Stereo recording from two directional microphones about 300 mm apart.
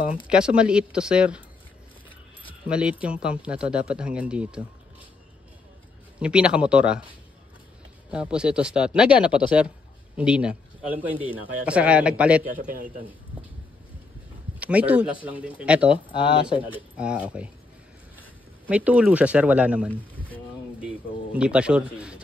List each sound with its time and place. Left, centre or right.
0.3 s speech: centre
2.7 s speech: centre
6.1 s speech: centre
8.1 s speech: centre
12.5 s a man's voice: right
14.6 s speech: centre
16.1 s speech: centre
16.9 s speech: centre